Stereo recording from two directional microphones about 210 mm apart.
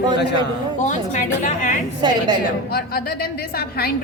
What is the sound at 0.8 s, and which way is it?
Speech, 35° left (ahead or behind).